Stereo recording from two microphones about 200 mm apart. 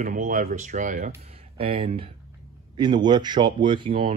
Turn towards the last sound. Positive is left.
turn(degrees=-25)  # may be behind; listen again after turning